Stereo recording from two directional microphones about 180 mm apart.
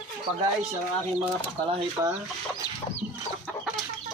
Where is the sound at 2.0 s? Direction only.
15° right (ahead or behind).